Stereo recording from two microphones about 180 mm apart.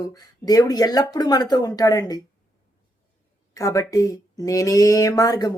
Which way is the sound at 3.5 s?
20° left (ahead or behind).